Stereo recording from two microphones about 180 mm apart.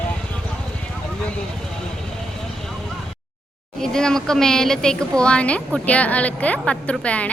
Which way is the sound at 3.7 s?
5° left (ahead or behind).